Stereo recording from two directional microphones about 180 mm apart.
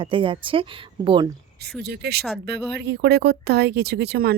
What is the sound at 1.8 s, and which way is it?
Speech, 65° right (ahead or behind).